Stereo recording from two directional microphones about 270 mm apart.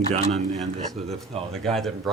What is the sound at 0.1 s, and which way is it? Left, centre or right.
A man's voice, right.